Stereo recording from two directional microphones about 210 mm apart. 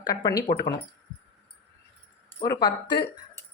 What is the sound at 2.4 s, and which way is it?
Speech, 15° left (ahead or behind).